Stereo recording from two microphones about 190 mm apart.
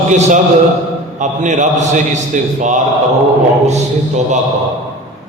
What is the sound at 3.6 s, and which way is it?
Speech, 35° right (ahead or behind).